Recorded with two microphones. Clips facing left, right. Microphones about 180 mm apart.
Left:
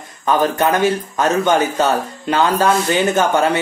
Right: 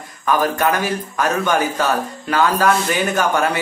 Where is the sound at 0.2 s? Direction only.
25° left (ahead or behind).